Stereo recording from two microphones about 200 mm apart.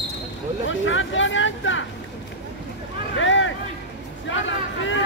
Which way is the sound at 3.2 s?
70° left (ahead or behind).